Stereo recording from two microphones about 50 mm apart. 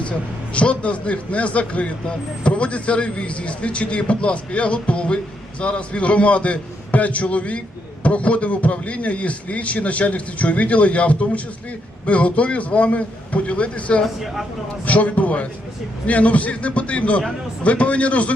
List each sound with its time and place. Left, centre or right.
0.0 s a man's voice: left
14.0 s speech: centre
14.8 s a man's voice: left